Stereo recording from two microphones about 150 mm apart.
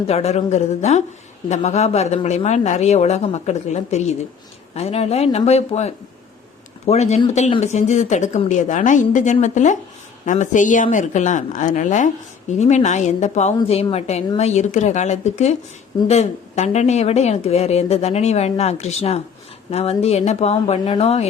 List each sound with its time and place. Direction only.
0.1 s a woman's voice: 45° left (ahead or behind)